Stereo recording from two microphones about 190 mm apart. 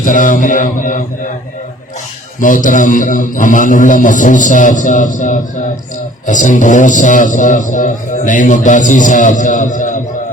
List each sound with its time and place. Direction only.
0.0 s a man's voice: 45° left (ahead or behind)
2.4 s a man's voice: 45° left (ahead or behind)